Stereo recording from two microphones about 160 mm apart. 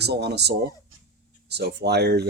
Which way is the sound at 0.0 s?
90° right.